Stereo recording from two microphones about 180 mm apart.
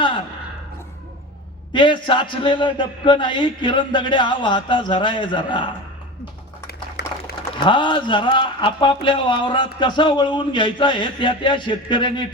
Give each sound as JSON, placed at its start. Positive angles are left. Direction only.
{"t": 1.7, "sound": "speech", "side_deg": 25}
{"t": 7.0, "sound": "a sound", "side_deg": 60}
{"t": 7.6, "sound": "speech", "side_deg": 25}